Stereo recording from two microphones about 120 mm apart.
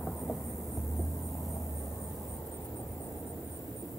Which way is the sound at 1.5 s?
25° left (ahead or behind).